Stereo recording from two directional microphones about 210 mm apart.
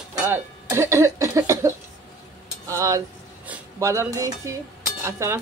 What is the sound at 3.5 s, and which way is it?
Speech, 15° right (ahead or behind).